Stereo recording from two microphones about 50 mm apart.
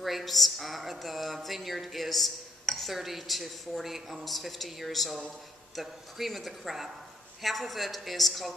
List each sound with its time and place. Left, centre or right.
0.0 s speech: centre